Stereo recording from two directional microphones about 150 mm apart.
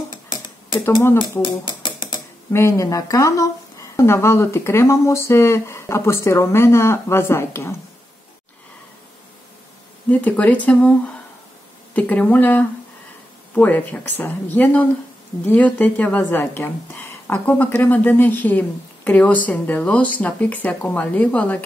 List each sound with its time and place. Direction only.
1.4 s a sound: 30° left (ahead or behind)
2.5 s a woman's voice: 20° left (ahead or behind)
10.0 s a woman's voice: 10° left (ahead or behind)
11.9 s a woman's voice: 10° left (ahead or behind)